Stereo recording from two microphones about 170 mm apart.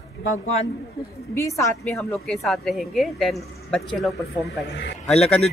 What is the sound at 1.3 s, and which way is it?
Speech, 15° left (ahead or behind).